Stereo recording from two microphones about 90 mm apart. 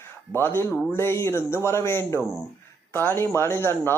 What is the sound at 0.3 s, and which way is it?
Speech, 25° left (ahead or behind).